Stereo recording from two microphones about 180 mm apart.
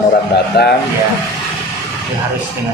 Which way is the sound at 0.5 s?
65° left (ahead or behind).